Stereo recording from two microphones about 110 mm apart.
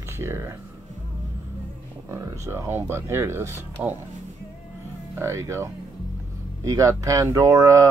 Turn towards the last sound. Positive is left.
turn(degrees=-30)  # may be behind; listen again after turning